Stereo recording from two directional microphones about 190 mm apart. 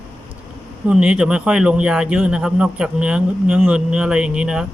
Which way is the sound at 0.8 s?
5° right (ahead or behind).